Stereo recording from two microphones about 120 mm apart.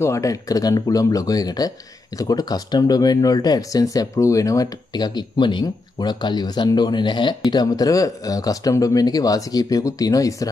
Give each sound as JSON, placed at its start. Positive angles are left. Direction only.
{"t": 0.0, "sound": "speech", "side_deg": 25}